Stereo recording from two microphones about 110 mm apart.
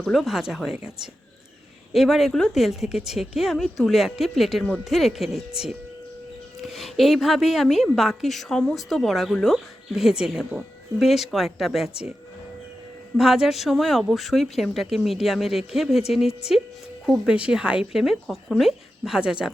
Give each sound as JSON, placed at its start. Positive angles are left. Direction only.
{"t": 0.0, "sound": "a woman's voice", "side_deg": 0}
{"t": 13.1, "sound": "a woman's voice", "side_deg": -5}